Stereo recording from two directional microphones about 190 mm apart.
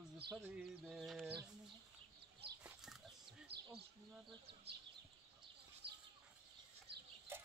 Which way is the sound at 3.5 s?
60° right (ahead or behind).